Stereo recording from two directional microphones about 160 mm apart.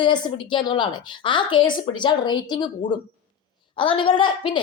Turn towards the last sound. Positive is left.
turn(degrees=30)  # may be behind; listen again after turning